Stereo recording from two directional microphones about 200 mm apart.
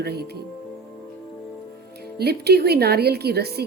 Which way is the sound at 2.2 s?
55° right (ahead or behind).